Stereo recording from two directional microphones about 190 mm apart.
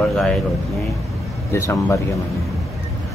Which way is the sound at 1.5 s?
15° left (ahead or behind).